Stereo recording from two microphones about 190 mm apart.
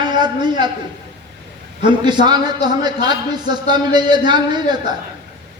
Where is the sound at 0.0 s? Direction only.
25° right (ahead or behind).